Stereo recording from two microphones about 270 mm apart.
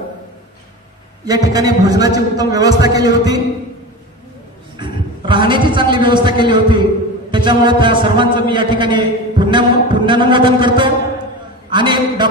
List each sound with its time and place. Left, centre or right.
1.2 s a man's voice: centre
4.7 s a man's voice: centre